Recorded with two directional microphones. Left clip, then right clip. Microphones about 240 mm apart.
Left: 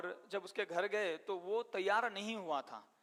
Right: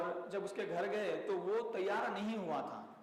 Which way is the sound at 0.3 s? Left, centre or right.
Left.